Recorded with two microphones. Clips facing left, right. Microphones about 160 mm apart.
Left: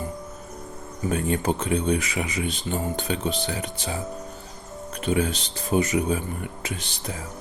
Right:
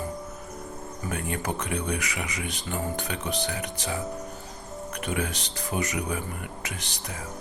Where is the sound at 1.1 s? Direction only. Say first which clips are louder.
Left 7 dB; 25° left (ahead or behind).